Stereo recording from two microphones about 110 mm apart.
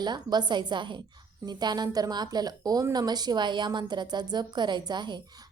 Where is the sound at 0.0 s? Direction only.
40° right (ahead or behind).